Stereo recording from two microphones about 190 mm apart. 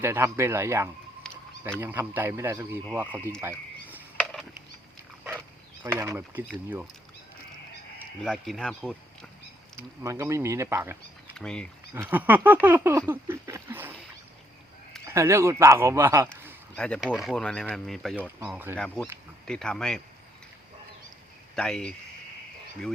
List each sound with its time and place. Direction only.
0.0 s speech: 10° right (ahead or behind)
1.2 s a sound: 5° left (ahead or behind)
1.8 s speech: 10° right (ahead or behind)
4.2 s a sound: 5° left (ahead or behind)
5.8 s speech: 15° right (ahead or behind)
8.2 s speech: centre (ahead or behind)
9.7 s speech: 15° right (ahead or behind)
11.3 s speech: 5° left (ahead or behind)
11.9 s speech: 10° right (ahead or behind)
15.0 s speech: 15° right (ahead or behind)
16.7 s speech: 5° left (ahead or behind)
19.5 s speech: 5° left (ahead or behind)
21.5 s speech: 5° left (ahead or behind)